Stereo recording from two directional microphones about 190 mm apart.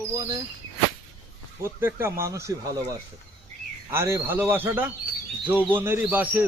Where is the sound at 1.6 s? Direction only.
15° right (ahead or behind).